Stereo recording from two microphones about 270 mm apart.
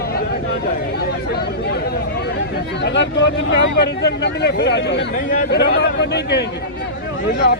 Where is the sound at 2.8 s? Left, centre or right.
Left.